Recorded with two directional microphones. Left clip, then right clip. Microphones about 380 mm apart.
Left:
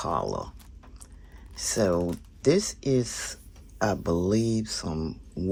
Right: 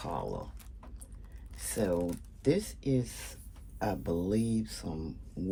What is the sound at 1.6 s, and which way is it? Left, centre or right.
Speech, centre.